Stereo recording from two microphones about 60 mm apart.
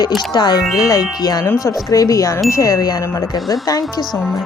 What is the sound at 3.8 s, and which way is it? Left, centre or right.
Speech, centre.